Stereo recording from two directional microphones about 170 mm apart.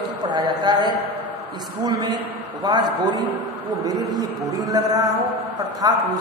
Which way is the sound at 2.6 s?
25° right (ahead or behind).